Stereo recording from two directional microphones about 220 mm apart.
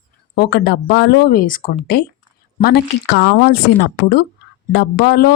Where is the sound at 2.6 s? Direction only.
50° left (ahead or behind).